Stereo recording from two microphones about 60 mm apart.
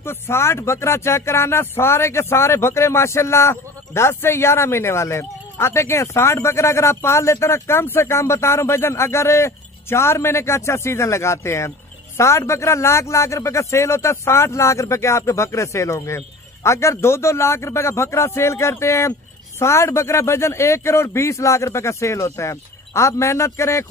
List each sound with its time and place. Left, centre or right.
0.0 s speech: left